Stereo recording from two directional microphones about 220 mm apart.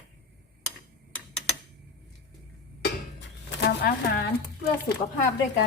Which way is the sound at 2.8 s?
50° left (ahead or behind).